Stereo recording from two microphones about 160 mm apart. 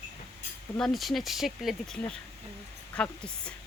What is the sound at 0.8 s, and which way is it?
A woman's voice, centre (ahead or behind).